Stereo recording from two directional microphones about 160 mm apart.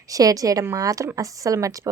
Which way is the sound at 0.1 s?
20° right (ahead or behind).